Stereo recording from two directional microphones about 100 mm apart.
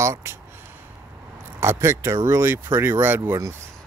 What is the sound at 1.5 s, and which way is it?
Speech, 25° right (ahead or behind).